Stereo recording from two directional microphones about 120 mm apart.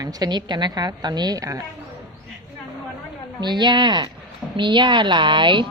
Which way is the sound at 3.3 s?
40° right (ahead or behind).